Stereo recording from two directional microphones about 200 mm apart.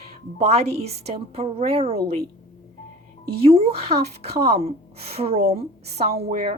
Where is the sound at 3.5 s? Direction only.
30° right (ahead or behind).